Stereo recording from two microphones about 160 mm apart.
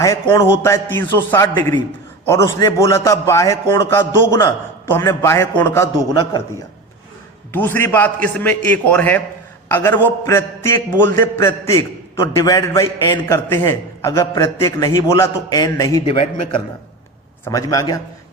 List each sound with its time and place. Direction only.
0.0 s a man's voice: 15° left (ahead or behind)
7.5 s a man's voice: 15° left (ahead or behind)
16.2 s a man's voice: 40° left (ahead or behind)
17.4 s a man's voice: 20° left (ahead or behind)